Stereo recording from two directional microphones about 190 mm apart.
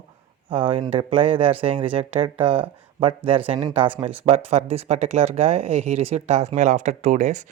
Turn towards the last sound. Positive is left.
turn(degrees=-40)  # may be behind; listen again after turning